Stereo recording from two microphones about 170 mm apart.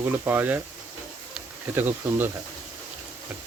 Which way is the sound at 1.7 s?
10° right (ahead or behind).